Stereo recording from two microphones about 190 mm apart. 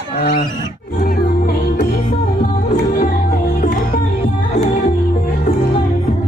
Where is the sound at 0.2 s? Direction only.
50° left (ahead or behind).